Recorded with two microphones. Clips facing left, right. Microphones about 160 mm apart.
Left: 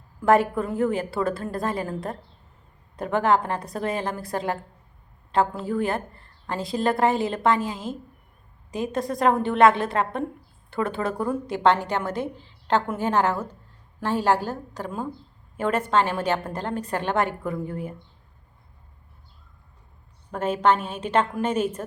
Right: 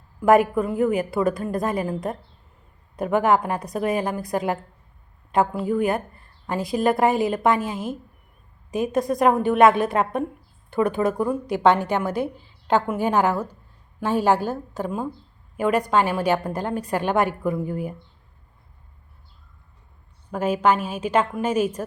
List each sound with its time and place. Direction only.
0.2 s a woman's voice: 15° right (ahead or behind)
8.7 s a woman's voice: 20° right (ahead or behind)
20.3 s a woman's voice: 10° right (ahead or behind)